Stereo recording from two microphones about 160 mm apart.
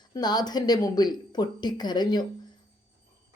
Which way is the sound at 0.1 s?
25° left (ahead or behind).